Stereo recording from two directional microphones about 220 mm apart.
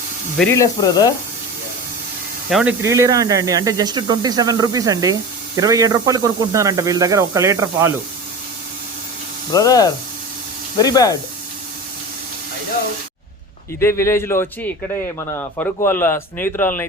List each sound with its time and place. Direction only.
0.3 s speech: 10° left (ahead or behind)
2.5 s speech: centre (ahead or behind)
2.8 s speech: 15° right (ahead or behind)
9.5 s speech: 15° left (ahead or behind)
13.7 s speech: 10° left (ahead or behind)